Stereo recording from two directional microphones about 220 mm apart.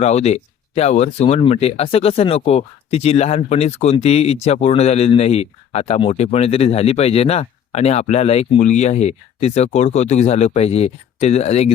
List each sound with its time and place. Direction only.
0.0 s speech: 30° left (ahead or behind)